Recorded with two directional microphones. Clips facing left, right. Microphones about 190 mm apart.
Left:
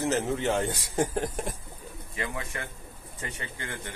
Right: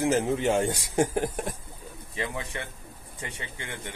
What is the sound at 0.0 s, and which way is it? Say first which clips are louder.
Speech: right 3 dB; 15° right (ahead or behind).